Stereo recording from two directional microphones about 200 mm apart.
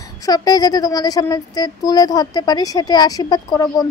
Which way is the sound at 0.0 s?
20° left (ahead or behind).